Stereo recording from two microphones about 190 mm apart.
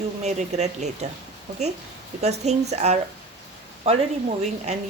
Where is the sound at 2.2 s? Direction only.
35° right (ahead or behind).